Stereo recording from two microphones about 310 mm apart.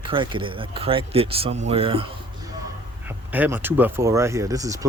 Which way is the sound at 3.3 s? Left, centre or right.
Centre.